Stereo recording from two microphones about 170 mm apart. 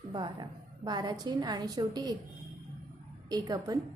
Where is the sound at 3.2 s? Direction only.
20° right (ahead or behind).